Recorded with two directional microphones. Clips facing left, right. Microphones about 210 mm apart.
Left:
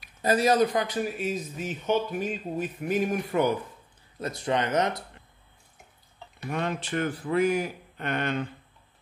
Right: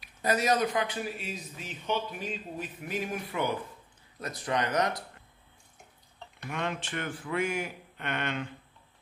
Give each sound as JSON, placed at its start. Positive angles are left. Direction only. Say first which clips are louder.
{"t": 0.2, "sound": "speech", "louder": "left 5 dB", "side_deg": 30}
{"t": 4.2, "sound": "speech", "louder": "left 4 dB", "side_deg": 25}
{"t": 6.5, "sound": "speech", "louder": "left 5 dB", "side_deg": 35}